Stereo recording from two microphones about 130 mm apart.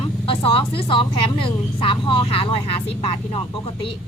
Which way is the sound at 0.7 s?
45° left (ahead or behind).